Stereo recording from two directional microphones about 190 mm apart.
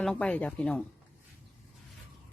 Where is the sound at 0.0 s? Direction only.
5° left (ahead or behind).